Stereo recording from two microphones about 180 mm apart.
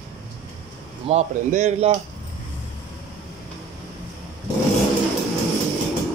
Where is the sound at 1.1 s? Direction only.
40° right (ahead or behind).